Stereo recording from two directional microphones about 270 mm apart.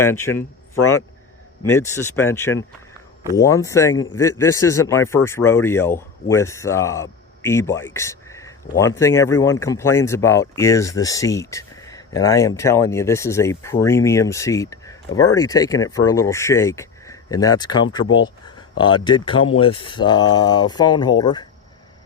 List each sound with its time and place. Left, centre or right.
0.0 s speech: centre
1.7 s speech: centre